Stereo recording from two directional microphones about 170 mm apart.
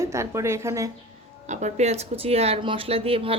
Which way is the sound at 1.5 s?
45° right (ahead or behind).